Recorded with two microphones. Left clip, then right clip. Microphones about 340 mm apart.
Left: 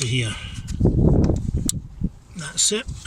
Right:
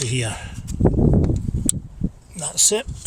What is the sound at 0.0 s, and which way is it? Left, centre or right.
Speech, centre.